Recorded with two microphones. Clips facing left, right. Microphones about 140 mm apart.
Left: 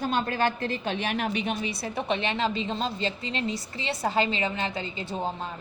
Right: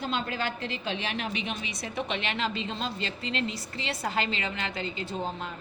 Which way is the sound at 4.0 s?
25° left (ahead or behind).